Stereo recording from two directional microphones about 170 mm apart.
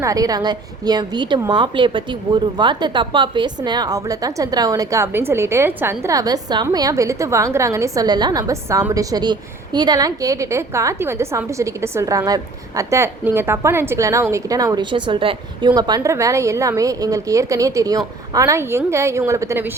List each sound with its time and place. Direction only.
0.0 s a woman's voice: 20° right (ahead or behind)